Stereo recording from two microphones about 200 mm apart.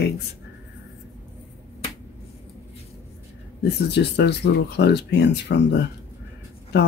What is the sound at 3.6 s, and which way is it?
Speech, 55° left (ahead or behind).